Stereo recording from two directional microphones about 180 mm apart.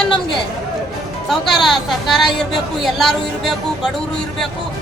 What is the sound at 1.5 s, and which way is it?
Speech, centre (ahead or behind).